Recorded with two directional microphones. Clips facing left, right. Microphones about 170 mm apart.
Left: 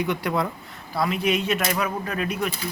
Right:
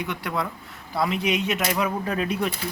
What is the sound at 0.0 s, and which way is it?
Speech, centre (ahead or behind).